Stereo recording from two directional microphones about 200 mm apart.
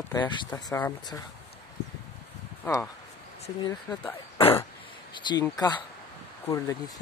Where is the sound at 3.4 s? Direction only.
25° left (ahead or behind).